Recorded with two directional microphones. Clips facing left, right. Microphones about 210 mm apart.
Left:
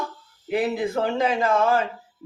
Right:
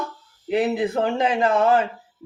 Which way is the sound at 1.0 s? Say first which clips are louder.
Right 1 dB; 25° right (ahead or behind).